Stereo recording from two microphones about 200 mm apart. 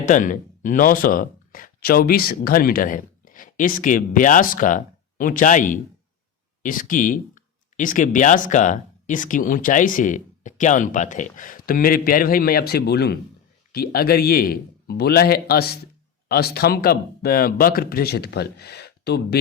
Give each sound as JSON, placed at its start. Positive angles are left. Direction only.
{"t": 0.0, "sound": "speech", "side_deg": 40}